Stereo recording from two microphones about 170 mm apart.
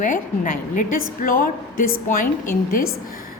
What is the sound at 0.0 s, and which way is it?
A woman's voice, 50° left (ahead or behind).